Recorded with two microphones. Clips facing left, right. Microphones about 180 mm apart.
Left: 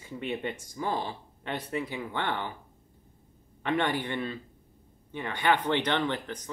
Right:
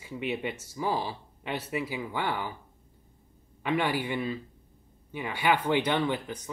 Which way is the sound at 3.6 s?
5° right (ahead or behind).